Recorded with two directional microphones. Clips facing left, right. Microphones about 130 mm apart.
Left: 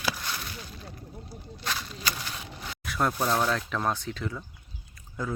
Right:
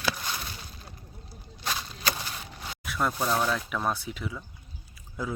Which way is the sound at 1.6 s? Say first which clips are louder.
Right 1 dB; 15° right (ahead or behind).